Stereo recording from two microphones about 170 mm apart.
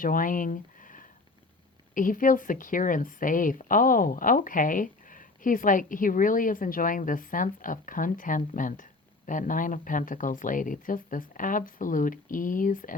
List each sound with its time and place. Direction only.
0.0 s speech: 55° left (ahead or behind)